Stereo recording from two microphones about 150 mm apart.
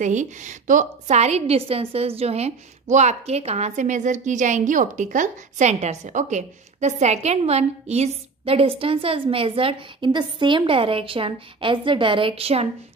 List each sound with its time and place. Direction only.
0.0 s a woman's voice: 55° right (ahead or behind)